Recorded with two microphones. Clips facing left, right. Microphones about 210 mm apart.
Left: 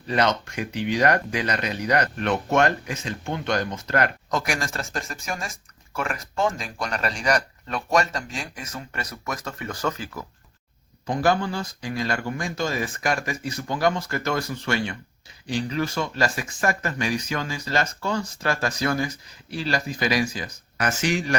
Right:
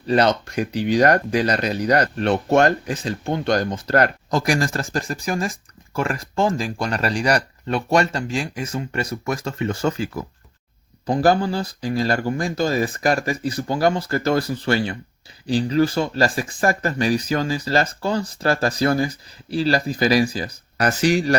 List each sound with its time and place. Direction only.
0.1 s speech: 35° right (ahead or behind)